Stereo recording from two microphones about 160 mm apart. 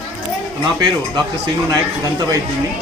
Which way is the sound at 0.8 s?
25° right (ahead or behind).